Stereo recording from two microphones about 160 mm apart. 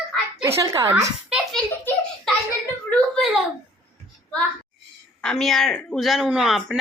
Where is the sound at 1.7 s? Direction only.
10° left (ahead or behind).